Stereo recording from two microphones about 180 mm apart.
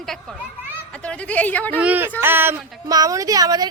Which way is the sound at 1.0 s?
10° left (ahead or behind).